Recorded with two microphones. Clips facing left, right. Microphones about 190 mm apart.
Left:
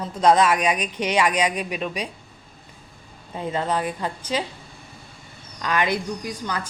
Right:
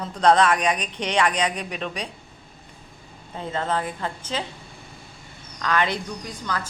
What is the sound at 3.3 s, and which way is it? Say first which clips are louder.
A man's voice: left 2 dB; 15° left (ahead or behind).